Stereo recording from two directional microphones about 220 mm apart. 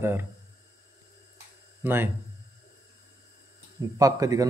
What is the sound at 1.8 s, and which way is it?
Speech, 10° right (ahead or behind).